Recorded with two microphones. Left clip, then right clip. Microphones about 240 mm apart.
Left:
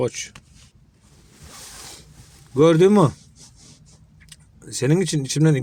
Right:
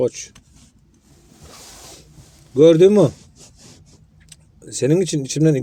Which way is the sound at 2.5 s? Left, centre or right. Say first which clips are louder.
Right 4 dB; centre.